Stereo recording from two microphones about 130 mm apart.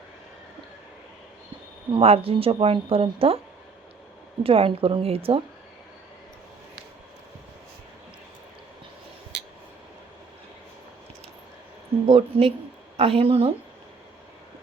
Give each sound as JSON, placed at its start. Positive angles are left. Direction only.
{"t": 1.9, "sound": "speech", "side_deg": -50}
{"t": 4.4, "sound": "speech", "side_deg": -45}
{"t": 12.0, "sound": "speech", "side_deg": -50}